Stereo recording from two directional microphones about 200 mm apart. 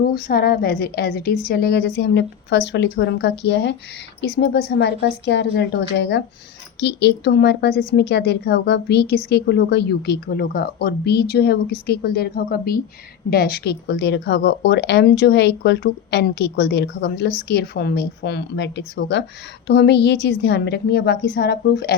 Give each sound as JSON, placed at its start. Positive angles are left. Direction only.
{"t": 0.0, "sound": "a woman's voice", "side_deg": 50}